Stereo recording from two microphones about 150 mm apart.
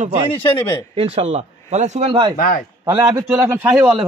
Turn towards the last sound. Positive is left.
turn(degrees=-10)  # may be behind; listen again after turning